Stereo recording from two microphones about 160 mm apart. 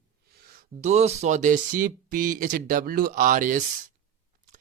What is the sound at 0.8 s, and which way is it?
Speech, 45° right (ahead or behind).